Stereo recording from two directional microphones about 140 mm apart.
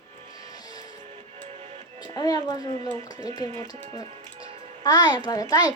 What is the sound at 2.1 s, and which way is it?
A child's voice, 25° left (ahead or behind).